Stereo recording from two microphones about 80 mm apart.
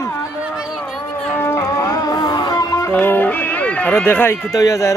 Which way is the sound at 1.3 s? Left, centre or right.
Left.